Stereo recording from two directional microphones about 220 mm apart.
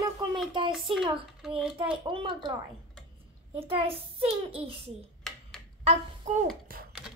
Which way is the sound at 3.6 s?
25° right (ahead or behind).